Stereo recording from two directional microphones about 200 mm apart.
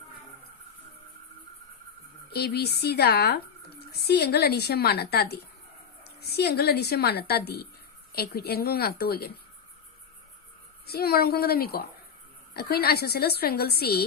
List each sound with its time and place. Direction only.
2.3 s speech: 55° left (ahead or behind)
10.8 s speech: 50° left (ahead or behind)